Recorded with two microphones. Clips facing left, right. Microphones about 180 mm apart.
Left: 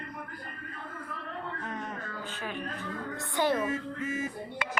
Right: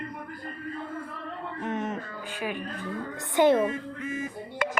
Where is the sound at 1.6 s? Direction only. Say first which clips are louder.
Right 7 dB; 20° right (ahead or behind).